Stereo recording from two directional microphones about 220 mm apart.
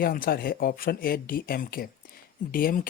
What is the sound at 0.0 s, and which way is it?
Speech, 40° left (ahead or behind).